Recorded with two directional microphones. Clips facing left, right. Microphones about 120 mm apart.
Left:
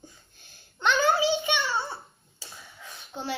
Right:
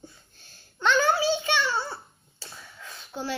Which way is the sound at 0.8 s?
20° left (ahead or behind).